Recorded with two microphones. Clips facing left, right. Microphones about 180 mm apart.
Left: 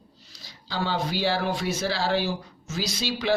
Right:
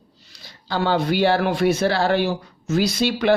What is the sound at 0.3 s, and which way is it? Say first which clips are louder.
Speech: right 6 dB; 60° right (ahead or behind).